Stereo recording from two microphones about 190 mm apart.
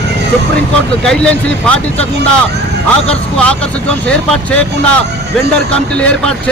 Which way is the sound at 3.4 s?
5° left (ahead or behind).